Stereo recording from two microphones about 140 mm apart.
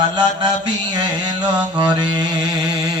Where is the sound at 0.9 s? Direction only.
30° right (ahead or behind).